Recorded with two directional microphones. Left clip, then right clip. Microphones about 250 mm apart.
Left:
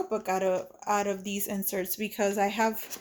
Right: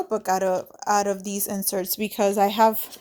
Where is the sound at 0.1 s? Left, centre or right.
Right.